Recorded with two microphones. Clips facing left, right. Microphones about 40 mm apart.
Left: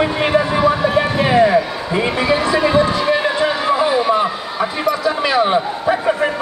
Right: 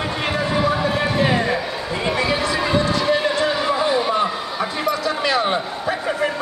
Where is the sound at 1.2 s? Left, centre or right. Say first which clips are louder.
Left 7 dB; centre.